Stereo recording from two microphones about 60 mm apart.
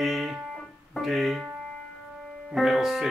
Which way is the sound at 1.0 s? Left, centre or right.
Centre.